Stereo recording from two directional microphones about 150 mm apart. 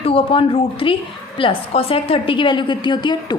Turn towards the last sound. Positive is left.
turn(degrees=30)  # may be behind; listen again after turning